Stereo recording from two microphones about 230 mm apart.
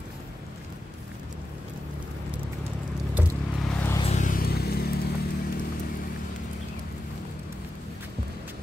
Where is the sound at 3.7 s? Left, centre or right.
Centre.